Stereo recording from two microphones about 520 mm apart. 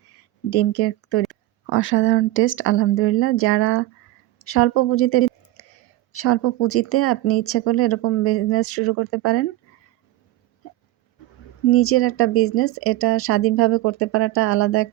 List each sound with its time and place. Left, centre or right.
0.1 s a sound: left
1.3 s speech: left
5.6 s whispering: left
6.1 s speech: left
11.7 s speech: left